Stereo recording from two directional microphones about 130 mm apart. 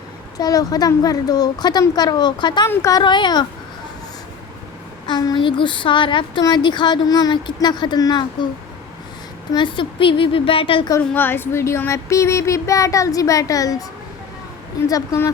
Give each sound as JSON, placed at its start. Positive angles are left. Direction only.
{"t": 0.3, "sound": "speech", "side_deg": 30}
{"t": 2.6, "sound": "speech", "side_deg": 25}
{"t": 3.0, "sound": "speech", "side_deg": 35}
{"t": 5.0, "sound": "speech", "side_deg": 35}
{"t": 9.5, "sound": "a woman's voice", "side_deg": 35}
{"t": 11.1, "sound": "speech", "side_deg": 15}
{"t": 14.8, "sound": "speech", "side_deg": 25}